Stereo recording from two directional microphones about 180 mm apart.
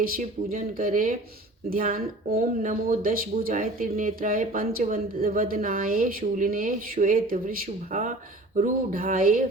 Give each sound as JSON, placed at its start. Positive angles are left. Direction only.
{"t": 0.0, "sound": "speech", "side_deg": -45}